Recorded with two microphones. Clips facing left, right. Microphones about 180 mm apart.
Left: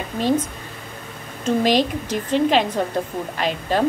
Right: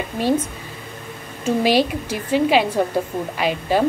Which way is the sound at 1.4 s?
10° right (ahead or behind).